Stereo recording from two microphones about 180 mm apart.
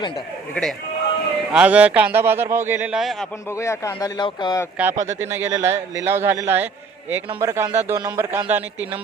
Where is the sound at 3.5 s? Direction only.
15° left (ahead or behind).